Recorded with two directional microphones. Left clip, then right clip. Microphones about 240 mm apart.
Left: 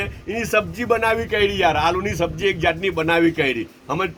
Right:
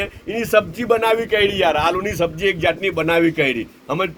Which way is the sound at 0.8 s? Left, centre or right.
Right.